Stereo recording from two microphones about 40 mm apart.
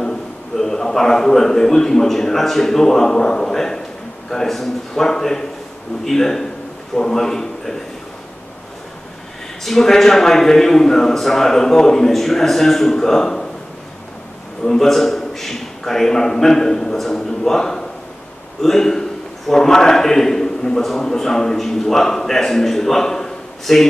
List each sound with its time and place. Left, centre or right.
0.0 s a man's voice: centre
9.7 s a man's voice: centre
14.6 s a man's voice: centre